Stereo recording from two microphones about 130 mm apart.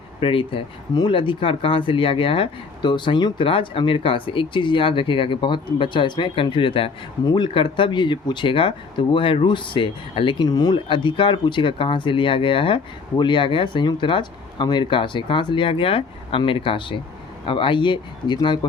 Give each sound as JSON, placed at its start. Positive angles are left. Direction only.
{"t": 0.2, "sound": "speech", "side_deg": 45}